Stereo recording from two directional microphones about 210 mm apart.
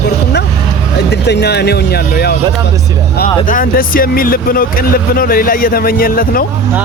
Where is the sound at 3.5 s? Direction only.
40° left (ahead or behind).